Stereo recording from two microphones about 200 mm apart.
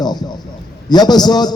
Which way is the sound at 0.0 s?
20° left (ahead or behind).